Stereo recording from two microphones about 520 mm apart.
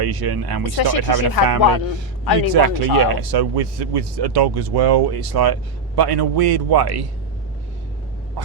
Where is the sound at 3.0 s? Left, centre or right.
Right.